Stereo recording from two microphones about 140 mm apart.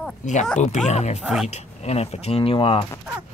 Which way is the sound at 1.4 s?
55° left (ahead or behind).